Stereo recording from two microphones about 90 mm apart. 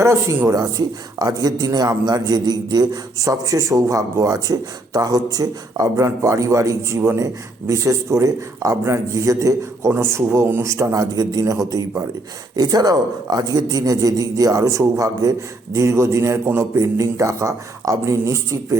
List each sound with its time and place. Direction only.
0.0 s a man's voice: 30° right (ahead or behind)